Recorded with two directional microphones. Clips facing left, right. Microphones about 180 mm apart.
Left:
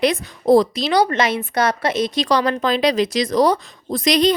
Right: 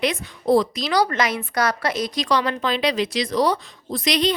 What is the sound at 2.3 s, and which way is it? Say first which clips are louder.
A woman's voice: left 3 dB; 40° left (ahead or behind).